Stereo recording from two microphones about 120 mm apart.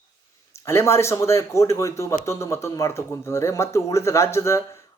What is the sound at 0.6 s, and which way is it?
Speech, 20° left (ahead or behind).